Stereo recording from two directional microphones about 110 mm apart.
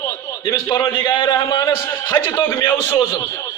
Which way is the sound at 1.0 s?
45° left (ahead or behind).